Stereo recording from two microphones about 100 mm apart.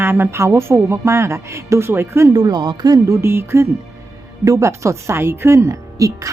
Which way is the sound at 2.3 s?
45° right (ahead or behind).